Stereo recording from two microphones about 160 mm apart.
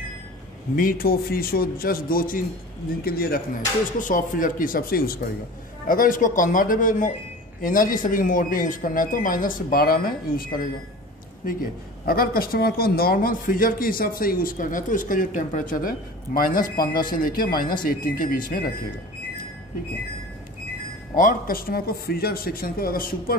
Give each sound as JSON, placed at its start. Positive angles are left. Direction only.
{"t": 0.7, "sound": "speech", "side_deg": 65}
{"t": 4.0, "sound": "speech", "side_deg": 55}
{"t": 12.1, "sound": "speech", "side_deg": 70}
{"t": 21.2, "sound": "speech", "side_deg": 60}